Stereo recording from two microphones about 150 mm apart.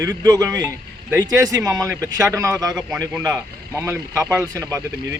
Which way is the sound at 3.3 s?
15° right (ahead or behind).